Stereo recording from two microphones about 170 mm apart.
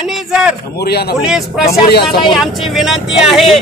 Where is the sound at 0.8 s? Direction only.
70° left (ahead or behind).